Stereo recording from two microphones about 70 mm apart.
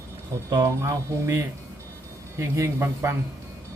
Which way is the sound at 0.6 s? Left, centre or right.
Right.